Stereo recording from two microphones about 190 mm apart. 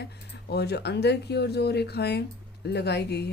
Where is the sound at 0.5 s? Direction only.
60° left (ahead or behind).